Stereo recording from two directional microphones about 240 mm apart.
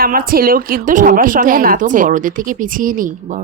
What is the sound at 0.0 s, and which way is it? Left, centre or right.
A woman's voice, right.